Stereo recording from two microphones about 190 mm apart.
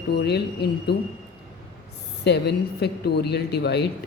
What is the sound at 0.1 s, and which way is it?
Speech, 60° left (ahead or behind).